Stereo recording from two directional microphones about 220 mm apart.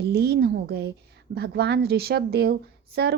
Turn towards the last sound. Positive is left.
turn(degrees=-50)  # may be behind; listen again after turning